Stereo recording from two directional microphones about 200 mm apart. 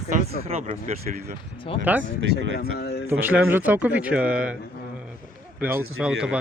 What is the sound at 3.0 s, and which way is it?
Speech, 10° right (ahead or behind).